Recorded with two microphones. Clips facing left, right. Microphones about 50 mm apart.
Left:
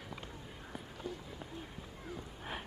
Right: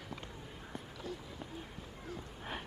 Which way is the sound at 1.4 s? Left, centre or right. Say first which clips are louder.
Even; centre.